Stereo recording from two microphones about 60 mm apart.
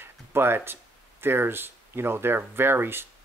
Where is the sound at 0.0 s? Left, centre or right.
Right.